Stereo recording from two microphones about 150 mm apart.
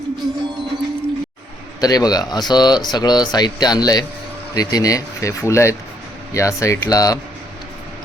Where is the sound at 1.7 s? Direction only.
25° left (ahead or behind).